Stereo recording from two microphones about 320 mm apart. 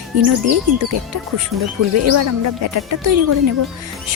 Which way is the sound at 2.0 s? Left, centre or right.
Right.